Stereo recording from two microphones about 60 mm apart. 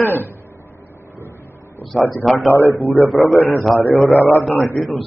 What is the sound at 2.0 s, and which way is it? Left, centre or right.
Speech, left.